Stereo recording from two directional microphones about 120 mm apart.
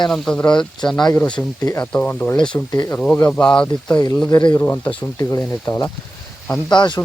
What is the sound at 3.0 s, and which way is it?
Speech, 10° left (ahead or behind).